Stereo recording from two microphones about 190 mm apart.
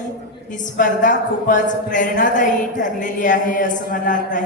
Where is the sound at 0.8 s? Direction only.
45° left (ahead or behind).